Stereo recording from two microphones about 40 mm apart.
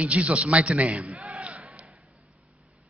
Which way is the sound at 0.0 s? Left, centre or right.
Right.